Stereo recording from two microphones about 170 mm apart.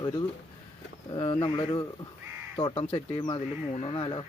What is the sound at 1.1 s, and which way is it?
Speech, 30° left (ahead or behind).